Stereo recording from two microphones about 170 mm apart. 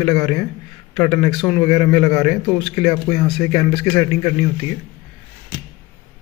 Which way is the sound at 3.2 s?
Centre (ahead or behind).